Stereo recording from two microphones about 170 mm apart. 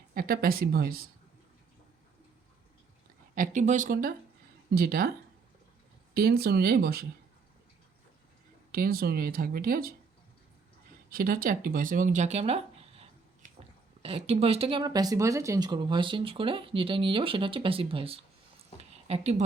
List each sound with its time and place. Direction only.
0.1 s speech: 60° right (ahead or behind)
3.3 s speech: 50° right (ahead or behind); by 5.1 s 65° right (ahead or behind)
6.1 s speech: 65° right (ahead or behind)
8.7 s speech: 60° right (ahead or behind)
11.1 s speech: 55° right (ahead or behind); by 18.2 s 35° right (ahead or behind)
18.8 s a sound: 40° right (ahead or behind)